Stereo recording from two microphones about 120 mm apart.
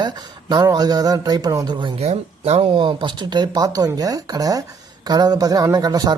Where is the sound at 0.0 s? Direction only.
35° right (ahead or behind).